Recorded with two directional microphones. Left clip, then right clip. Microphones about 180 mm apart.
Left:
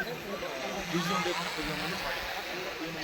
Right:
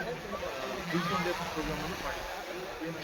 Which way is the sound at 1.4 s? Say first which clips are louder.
Left 2 dB; 20° right (ahead or behind).